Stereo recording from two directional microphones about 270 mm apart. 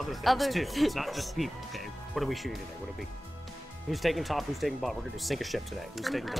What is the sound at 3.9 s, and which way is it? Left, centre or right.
Speech, centre.